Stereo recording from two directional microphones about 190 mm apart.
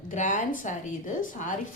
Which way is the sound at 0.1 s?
40° left (ahead or behind).